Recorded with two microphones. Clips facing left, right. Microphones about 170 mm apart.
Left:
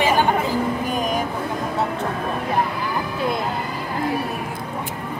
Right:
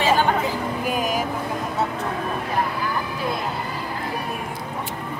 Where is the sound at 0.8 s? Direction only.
5° right (ahead or behind).